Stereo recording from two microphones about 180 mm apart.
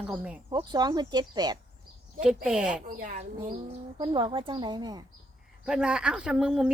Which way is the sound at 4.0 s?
25° right (ahead or behind).